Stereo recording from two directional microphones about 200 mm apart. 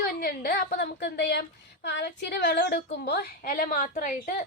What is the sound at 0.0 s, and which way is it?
A woman's voice, 50° left (ahead or behind).